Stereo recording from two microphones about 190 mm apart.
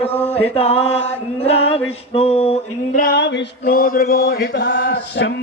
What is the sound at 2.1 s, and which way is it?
Mantra, 30° left (ahead or behind).